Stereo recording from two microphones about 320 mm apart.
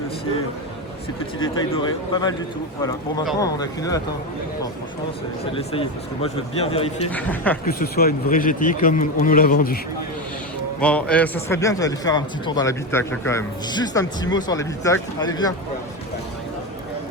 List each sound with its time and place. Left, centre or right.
1.4 s speech: centre
3.4 s speech: centre
5.5 s speech: centre
7.1 s speech: centre
7.6 s a man's voice: left
10.8 s speech: centre